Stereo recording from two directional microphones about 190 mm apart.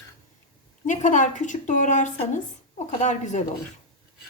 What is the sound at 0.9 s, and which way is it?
A woman's voice, 40° left (ahead or behind).